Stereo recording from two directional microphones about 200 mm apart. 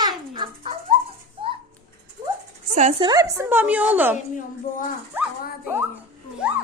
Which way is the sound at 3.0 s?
15° right (ahead or behind).